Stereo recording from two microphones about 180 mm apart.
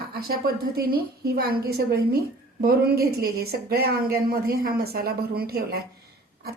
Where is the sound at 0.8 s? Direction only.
55° right (ahead or behind).